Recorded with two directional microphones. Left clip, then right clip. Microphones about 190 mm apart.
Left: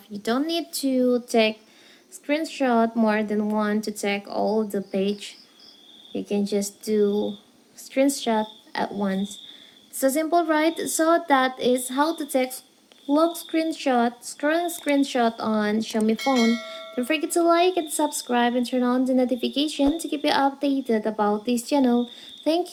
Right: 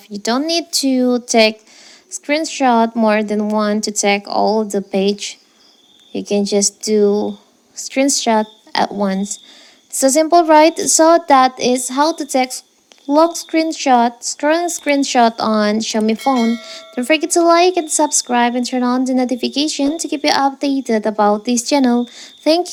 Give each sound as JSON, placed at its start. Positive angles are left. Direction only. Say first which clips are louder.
{"t": 0.1, "sound": "a woman's voice", "louder": "right 8 dB", "side_deg": -40}
{"t": 16.1, "sound": "speech", "louder": "right 6 dB", "side_deg": 0}
{"t": 16.9, "sound": "a woman's voice", "louder": "right 10 dB", "side_deg": -40}